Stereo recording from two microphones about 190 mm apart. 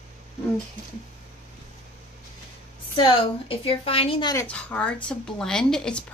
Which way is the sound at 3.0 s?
25° left (ahead or behind).